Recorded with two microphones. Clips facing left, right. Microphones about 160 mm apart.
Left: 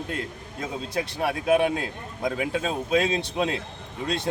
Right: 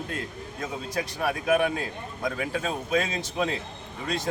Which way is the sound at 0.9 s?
25° left (ahead or behind).